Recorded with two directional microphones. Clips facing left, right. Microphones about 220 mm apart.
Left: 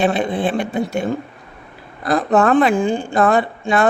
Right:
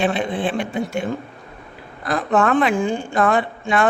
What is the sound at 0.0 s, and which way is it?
Speech, 40° left (ahead or behind).